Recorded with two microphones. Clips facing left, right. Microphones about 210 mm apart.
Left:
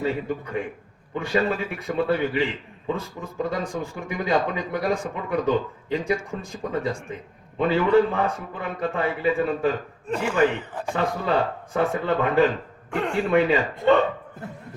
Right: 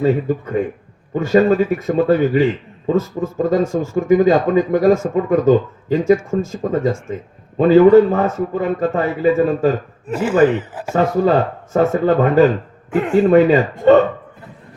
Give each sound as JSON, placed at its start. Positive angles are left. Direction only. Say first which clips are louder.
{"t": 0.0, "sound": "a man's voice", "louder": "right 9 dB", "side_deg": -50}
{"t": 3.6, "sound": "speech", "louder": "right 11 dB", "side_deg": 15}
{"t": 4.1, "sound": "a man's voice", "louder": "right 12 dB", "side_deg": -45}
{"t": 10.1, "sound": "speech", "louder": "right 6 dB", "side_deg": -5}
{"t": 10.9, "sound": "a man's voice", "louder": "right 9 dB", "side_deg": -45}
{"t": 12.9, "sound": "speech", "louder": "right 8 dB", "side_deg": -5}
{"t": 13.2, "sound": "speech", "louder": "right 8 dB", "side_deg": -40}